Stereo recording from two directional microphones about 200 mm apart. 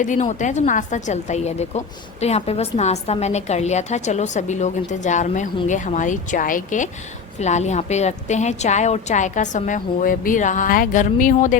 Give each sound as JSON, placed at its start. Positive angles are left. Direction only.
{"t": 0.0, "sound": "a woman's voice", "side_deg": 35}